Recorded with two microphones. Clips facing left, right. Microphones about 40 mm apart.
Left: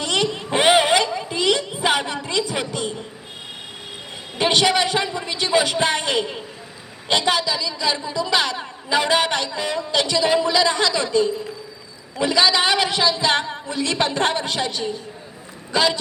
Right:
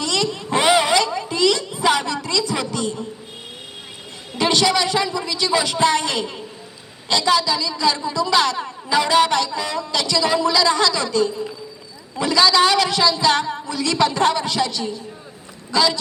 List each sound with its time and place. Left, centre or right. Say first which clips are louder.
0.0 s vehicle: even; left
4.4 s a woman's voice: even; left